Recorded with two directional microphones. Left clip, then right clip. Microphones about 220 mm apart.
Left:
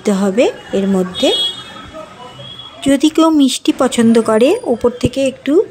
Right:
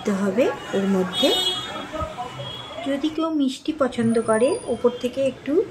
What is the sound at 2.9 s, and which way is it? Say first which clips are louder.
Speech: left 13 dB; 55° left (ahead or behind).